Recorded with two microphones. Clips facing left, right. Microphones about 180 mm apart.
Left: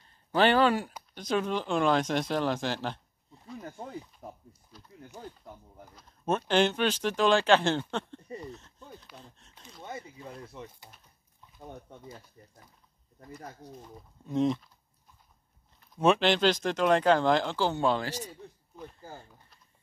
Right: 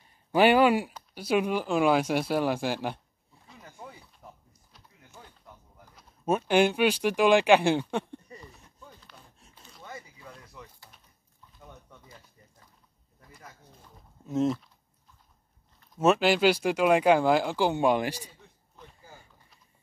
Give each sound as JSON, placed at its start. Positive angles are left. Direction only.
{"t": 0.0, "sound": "a sound", "side_deg": -10}
{"t": 1.1, "sound": "speech", "side_deg": -10}
{"t": 3.5, "sound": "a sound", "side_deg": 50}
{"t": 5.9, "sound": "speech", "side_deg": -10}
{"t": 9.8, "sound": "a sound", "side_deg": 25}
{"t": 11.6, "sound": "speech", "side_deg": 35}
{"t": 13.4, "sound": "speech", "side_deg": 35}
{"t": 14.2, "sound": "speech", "side_deg": -5}
{"t": 16.0, "sound": "speech", "side_deg": -5}